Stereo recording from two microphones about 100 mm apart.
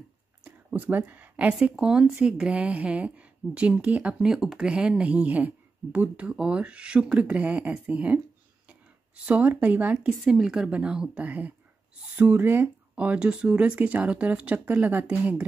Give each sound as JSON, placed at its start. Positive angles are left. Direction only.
{"t": 0.4, "sound": "a woman's voice", "side_deg": -15}